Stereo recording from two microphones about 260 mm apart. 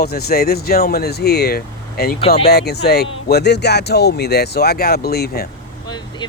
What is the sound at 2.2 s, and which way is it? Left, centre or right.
Speech, left.